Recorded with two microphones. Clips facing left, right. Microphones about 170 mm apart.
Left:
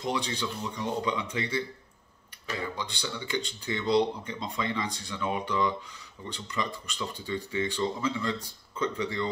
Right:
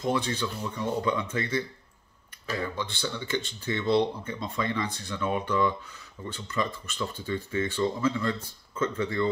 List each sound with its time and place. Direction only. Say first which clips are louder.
0.0 s speech: right 3 dB; 15° left (ahead or behind)
2.6 s speech: right 2 dB; 15° left (ahead or behind)